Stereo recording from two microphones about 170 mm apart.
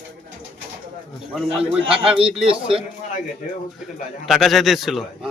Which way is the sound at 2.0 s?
35° right (ahead or behind).